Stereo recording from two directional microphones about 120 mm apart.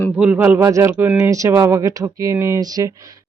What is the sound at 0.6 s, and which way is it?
Speech, 25° right (ahead or behind).